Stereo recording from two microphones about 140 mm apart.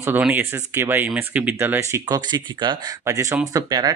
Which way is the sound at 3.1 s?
20° right (ahead or behind).